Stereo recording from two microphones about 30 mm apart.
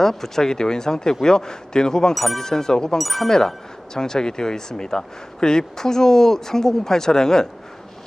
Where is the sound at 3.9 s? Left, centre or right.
Left.